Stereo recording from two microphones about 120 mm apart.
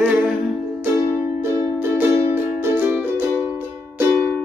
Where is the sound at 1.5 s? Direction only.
20° right (ahead or behind).